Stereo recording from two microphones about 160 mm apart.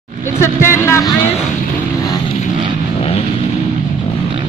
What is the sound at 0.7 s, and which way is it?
Vehicle, 15° left (ahead or behind).